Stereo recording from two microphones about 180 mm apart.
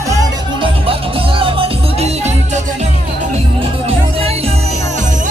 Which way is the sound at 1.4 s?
30° right (ahead or behind).